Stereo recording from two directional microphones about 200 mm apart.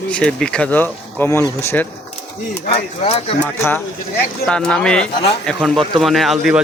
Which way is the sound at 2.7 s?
30° left (ahead or behind).